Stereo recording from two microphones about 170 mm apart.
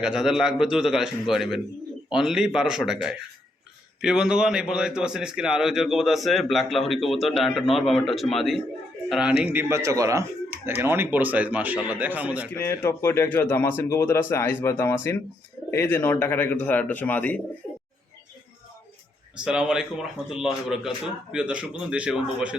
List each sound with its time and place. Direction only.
0.0 s a man's voice: 5° right (ahead or behind)
12.5 s speech: 10° left (ahead or behind)
17.6 s bird: 15° left (ahead or behind)
19.5 s a man's voice: 5° right (ahead or behind)